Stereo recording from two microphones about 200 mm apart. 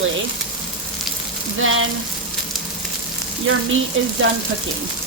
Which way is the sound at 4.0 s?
75° right (ahead or behind).